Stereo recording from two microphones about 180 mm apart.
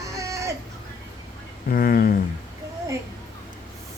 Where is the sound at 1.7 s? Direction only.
55° left (ahead or behind).